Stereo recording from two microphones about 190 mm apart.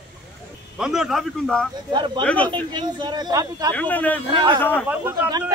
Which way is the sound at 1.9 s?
25° right (ahead or behind).